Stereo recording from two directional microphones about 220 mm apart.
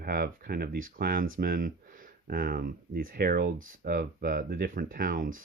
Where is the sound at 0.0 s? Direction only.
40° right (ahead or behind).